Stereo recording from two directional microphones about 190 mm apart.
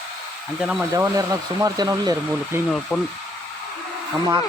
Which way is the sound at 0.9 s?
15° right (ahead or behind).